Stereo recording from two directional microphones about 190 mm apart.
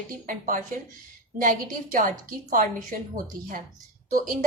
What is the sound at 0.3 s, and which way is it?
A woman's voice, 45° right (ahead or behind).